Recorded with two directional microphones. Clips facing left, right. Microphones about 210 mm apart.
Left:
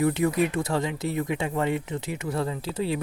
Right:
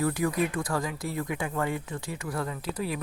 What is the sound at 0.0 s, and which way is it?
Speech, 25° left (ahead or behind).